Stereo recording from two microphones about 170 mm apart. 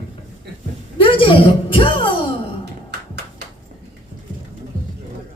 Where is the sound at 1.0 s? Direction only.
30° left (ahead or behind).